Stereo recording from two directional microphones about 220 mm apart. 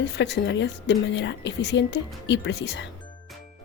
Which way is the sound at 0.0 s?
50° left (ahead or behind).